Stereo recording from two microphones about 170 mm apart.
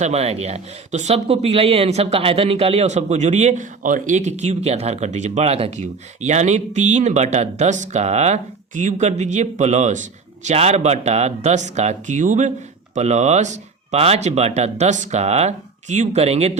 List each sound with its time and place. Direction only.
0.0 s speech: 40° right (ahead or behind)